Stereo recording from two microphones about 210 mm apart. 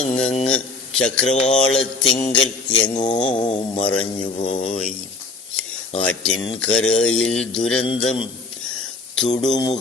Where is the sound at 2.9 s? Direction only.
25° left (ahead or behind).